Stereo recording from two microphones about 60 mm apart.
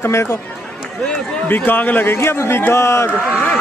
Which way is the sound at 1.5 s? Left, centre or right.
Left.